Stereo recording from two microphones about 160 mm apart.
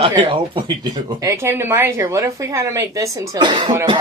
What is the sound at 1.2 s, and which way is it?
Speech, 20° right (ahead or behind).